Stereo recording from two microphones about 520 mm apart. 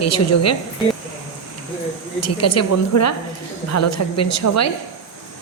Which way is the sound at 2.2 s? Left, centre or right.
Left.